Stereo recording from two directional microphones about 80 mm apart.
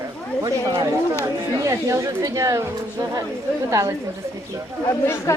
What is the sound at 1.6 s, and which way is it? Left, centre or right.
Speech, right.